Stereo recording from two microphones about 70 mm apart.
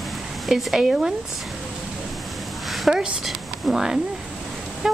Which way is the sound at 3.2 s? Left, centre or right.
Centre.